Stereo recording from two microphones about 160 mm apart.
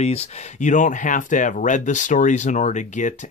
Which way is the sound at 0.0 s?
40° left (ahead or behind).